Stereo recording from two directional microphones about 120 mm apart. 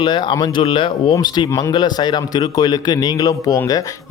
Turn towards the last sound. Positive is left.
turn(degrees=30)  # may be behind; listen again after turning